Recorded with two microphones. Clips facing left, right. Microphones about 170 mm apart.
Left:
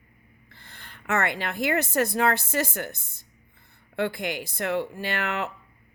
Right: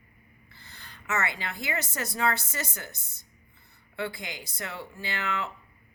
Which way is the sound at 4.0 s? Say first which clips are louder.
Left 7 dB; 60° left (ahead or behind).